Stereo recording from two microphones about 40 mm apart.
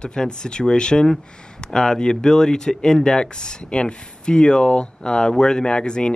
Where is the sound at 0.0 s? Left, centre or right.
Centre.